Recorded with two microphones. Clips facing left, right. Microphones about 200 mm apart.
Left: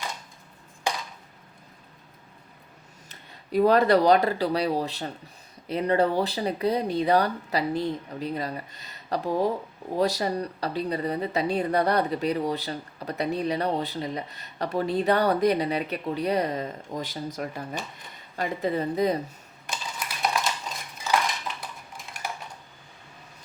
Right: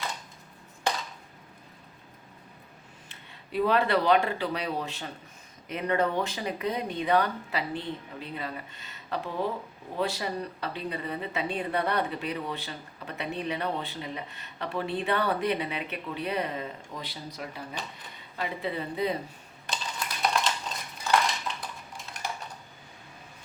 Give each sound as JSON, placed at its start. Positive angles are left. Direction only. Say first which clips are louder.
{"t": 3.1, "sound": "a woman's voice", "louder": "left 8 dB", "side_deg": 40}
{"t": 20.2, "sound": "a sound", "louder": "left 1 dB", "side_deg": 5}
{"t": 21.0, "sound": "cutlery", "louder": "even", "side_deg": 5}